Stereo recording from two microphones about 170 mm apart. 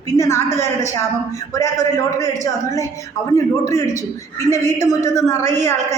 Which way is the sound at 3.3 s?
15° left (ahead or behind).